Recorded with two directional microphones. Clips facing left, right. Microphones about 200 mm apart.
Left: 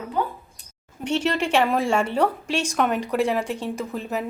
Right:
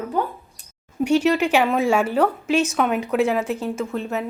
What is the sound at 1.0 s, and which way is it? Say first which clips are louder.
A woman's voice: right 5 dB; 10° right (ahead or behind).